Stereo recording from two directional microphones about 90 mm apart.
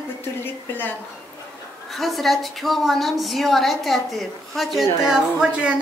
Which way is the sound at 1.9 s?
Centre (ahead or behind).